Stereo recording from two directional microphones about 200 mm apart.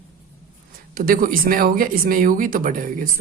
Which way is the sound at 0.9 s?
45° right (ahead or behind).